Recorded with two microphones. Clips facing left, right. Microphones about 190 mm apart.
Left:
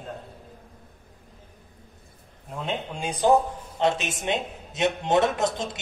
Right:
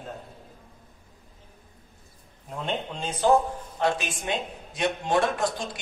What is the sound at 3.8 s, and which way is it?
A man's voice, 20° left (ahead or behind).